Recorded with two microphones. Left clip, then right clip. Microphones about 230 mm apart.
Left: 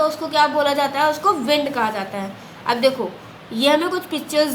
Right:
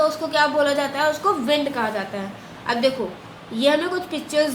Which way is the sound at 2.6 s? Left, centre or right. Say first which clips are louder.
Left 3 dB; left.